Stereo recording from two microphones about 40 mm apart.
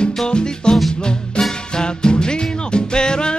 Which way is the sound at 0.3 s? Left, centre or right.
Left.